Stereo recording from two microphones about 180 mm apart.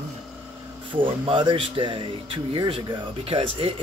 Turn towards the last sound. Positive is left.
turn(degrees=-30)  # may be behind; listen again after turning